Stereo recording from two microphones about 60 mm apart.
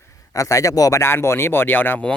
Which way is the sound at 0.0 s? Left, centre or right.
Left.